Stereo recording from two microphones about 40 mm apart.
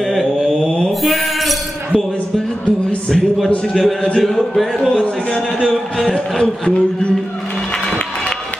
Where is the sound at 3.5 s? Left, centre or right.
Left.